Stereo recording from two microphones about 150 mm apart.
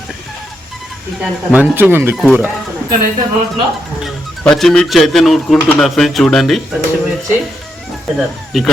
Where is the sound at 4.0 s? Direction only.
Centre (ahead or behind).